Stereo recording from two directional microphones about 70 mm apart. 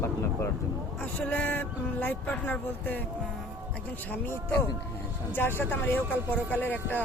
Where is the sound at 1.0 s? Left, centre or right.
Left.